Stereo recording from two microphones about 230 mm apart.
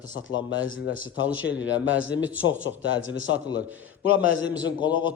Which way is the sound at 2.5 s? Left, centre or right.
Left.